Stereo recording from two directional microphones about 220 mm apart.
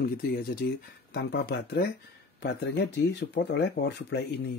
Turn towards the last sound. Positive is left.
turn(degrees=50)  # may be behind; listen again after turning